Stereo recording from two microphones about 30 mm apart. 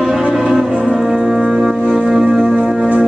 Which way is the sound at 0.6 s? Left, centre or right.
Centre.